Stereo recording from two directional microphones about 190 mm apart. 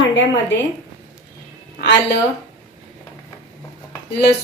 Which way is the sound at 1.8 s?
65° left (ahead or behind).